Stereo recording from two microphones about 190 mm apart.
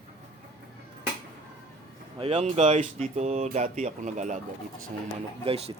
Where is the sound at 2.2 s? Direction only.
35° right (ahead or behind).